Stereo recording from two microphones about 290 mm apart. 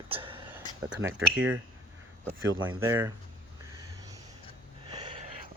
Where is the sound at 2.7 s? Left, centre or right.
Centre.